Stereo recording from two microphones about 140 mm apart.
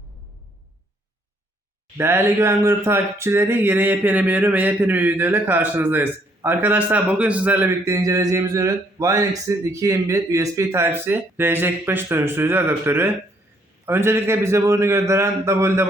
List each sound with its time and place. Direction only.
2.0 s a man's voice: 15° right (ahead or behind)